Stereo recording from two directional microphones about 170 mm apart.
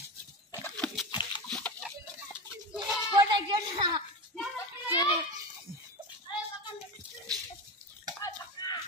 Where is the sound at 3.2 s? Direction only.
25° right (ahead or behind).